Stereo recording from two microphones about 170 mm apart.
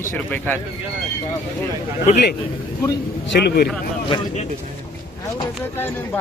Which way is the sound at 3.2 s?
75° left (ahead or behind).